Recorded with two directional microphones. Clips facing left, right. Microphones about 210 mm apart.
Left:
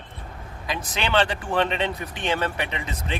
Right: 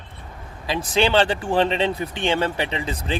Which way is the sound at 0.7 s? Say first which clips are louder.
Right 7 dB; 30° right (ahead or behind).